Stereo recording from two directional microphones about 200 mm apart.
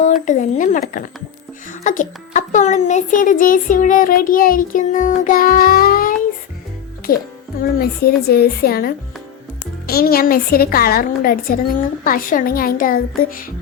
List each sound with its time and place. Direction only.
0.3 s a child's voice: 40° left (ahead or behind)